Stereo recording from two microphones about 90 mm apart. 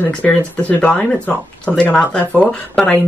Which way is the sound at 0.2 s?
10° left (ahead or behind).